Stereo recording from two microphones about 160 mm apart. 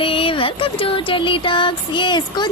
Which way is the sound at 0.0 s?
35° left (ahead or behind).